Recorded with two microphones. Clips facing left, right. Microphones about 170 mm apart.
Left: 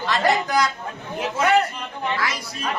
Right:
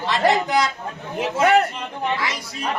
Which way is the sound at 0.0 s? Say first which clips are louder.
Right 2 dB; 20° right (ahead or behind).